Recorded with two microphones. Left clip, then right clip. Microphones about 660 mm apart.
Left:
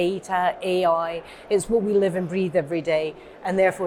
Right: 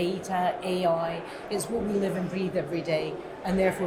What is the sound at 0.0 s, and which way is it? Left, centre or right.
A woman's voice, left.